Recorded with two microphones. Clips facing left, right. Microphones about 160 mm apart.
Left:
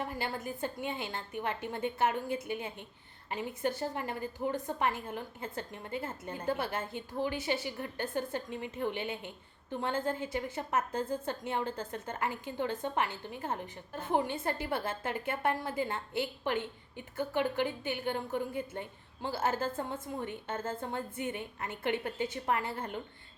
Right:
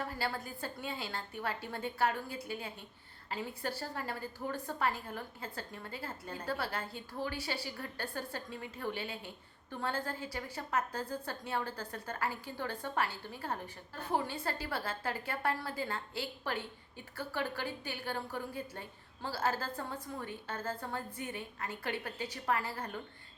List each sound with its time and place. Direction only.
0.0 s a woman's voice: 20° left (ahead or behind)